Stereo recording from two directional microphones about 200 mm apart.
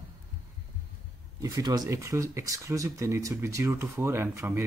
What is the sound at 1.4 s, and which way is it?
Speech, 20° right (ahead or behind).